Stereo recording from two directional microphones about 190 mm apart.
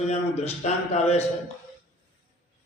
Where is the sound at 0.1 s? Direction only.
35° left (ahead or behind).